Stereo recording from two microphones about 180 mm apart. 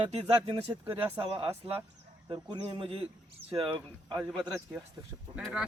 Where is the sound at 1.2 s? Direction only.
30° right (ahead or behind).